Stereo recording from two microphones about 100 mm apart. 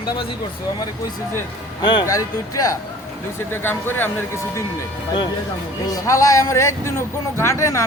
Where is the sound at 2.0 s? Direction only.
35° left (ahead or behind).